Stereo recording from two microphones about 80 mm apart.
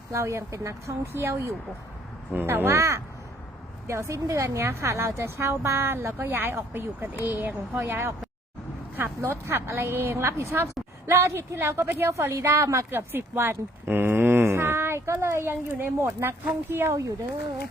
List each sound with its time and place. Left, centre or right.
0.1 s speech: right
9.5 s speech: right